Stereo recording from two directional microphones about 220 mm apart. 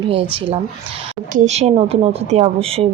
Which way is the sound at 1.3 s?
30° right (ahead or behind).